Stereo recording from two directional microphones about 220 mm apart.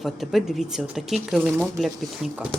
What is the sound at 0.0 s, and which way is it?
Speech, centre (ahead or behind).